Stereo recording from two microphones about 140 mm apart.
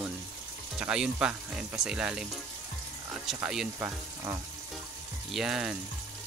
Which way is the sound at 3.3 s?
Centre (ahead or behind).